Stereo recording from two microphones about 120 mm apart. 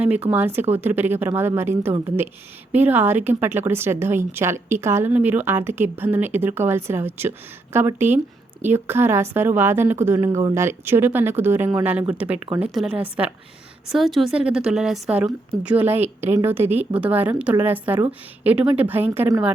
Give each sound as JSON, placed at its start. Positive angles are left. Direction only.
{"t": 0.0, "sound": "a woman's voice", "side_deg": -10}